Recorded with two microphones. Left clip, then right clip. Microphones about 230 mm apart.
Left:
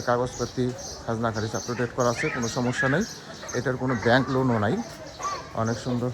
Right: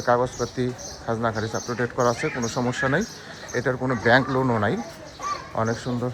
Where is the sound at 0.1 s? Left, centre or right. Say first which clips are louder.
Right 3 dB; centre.